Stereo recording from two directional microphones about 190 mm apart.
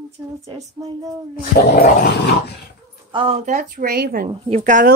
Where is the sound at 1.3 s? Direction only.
50° left (ahead or behind).